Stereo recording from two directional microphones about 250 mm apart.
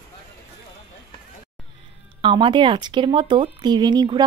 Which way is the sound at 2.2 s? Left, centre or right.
Centre.